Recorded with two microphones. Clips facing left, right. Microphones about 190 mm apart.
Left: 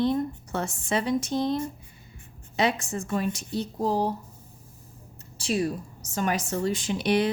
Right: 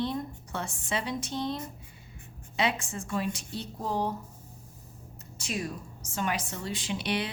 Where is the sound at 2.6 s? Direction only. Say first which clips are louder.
Left 4 dB; 40° left (ahead or behind).